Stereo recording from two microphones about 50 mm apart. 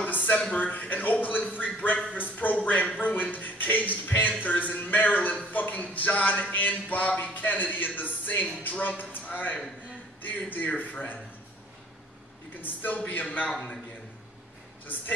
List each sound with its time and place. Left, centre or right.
0.0 s a man's voice: left
2.1 s music: left
4.4 s a sound: left
8.6 s a man's voice: left
12.6 s a man's voice: left